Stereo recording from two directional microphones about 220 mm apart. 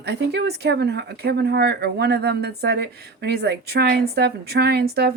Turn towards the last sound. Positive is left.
turn(degrees=-45)  # may be behind; listen again after turning